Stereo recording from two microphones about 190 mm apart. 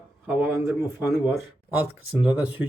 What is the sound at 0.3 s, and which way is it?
Speech, 10° right (ahead or behind).